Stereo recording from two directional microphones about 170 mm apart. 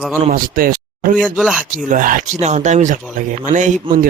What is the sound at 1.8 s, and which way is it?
Speech, 50° right (ahead or behind).